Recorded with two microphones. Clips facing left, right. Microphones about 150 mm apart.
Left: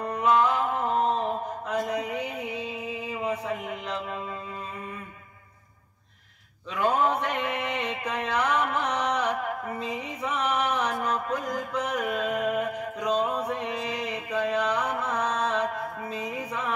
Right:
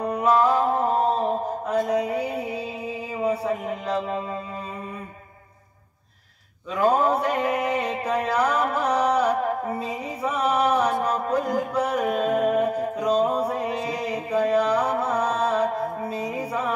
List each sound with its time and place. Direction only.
0.2 s mantra: 35° right (ahead or behind)
6.7 s mantra: 35° right (ahead or behind)